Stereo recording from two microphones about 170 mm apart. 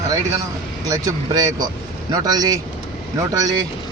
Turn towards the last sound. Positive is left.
turn(degrees=-20)  # may be behind; listen again after turning